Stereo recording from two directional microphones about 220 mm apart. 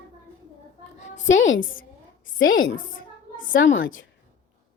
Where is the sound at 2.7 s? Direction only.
40° left (ahead or behind).